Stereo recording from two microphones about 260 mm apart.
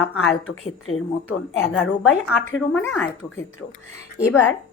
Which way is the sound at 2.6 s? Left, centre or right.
Centre.